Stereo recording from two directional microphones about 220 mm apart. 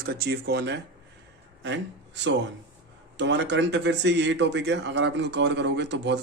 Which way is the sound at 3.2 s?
55° right (ahead or behind).